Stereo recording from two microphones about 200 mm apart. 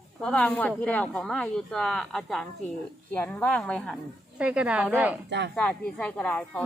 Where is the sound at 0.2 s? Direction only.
5° left (ahead or behind).